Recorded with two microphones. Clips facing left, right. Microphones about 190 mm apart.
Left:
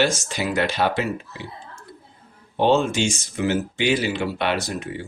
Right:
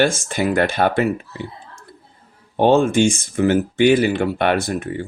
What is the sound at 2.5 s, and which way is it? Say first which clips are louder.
Speech: right 5 dB; 50° right (ahead or behind).